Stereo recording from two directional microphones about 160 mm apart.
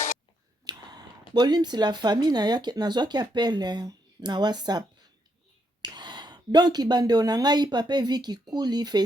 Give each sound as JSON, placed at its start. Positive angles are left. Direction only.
{"t": 0.6, "sound": "a sound", "side_deg": -25}
{"t": 1.3, "sound": "speech", "side_deg": -25}
{"t": 5.8, "sound": "speech", "side_deg": -25}